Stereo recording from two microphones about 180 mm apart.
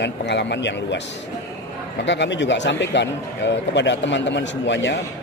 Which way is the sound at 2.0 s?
80° left.